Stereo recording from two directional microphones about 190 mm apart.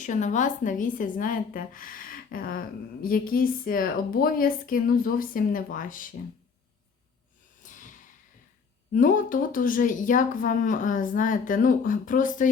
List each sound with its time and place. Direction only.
0.0 s speech: 40° left (ahead or behind)
7.6 s a sound: 40° left (ahead or behind)
8.9 s speech: 45° left (ahead or behind)